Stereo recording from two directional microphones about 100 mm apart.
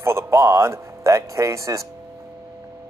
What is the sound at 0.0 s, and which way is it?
Speech, 25° right (ahead or behind).